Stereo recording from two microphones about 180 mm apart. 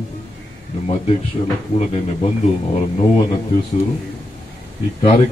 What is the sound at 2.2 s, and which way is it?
Speech, 35° left (ahead or behind).